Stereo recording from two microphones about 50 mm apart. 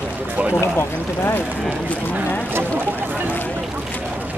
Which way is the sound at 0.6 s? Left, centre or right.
Left.